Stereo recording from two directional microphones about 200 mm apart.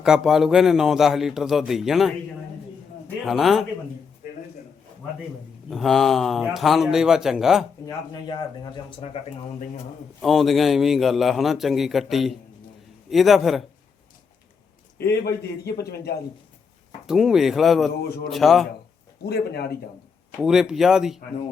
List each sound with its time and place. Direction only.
0.0 s a man's voice: centre (ahead or behind)
3.2 s a man's voice: centre (ahead or behind)
5.7 s a man's voice: centre (ahead or behind)
7.9 s speech: 20° left (ahead or behind)
10.2 s a man's voice: centre (ahead or behind)
14.9 s a man's voice: 55° left (ahead or behind)
17.1 s a man's voice: centre (ahead or behind)
19.2 s speech: 55° left (ahead or behind)
20.4 s a man's voice: 5° right (ahead or behind)